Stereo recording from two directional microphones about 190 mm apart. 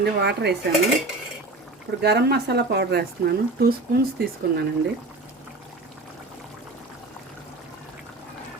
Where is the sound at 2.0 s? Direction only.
60° right (ahead or behind).